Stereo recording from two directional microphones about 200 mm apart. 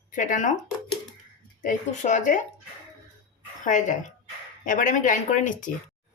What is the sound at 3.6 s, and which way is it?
Speech, 40° left (ahead or behind).